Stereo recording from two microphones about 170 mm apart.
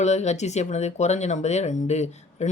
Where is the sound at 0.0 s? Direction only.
40° left (ahead or behind).